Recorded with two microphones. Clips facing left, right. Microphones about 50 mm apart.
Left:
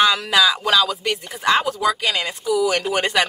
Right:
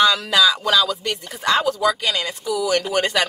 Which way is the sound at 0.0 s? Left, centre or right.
Centre.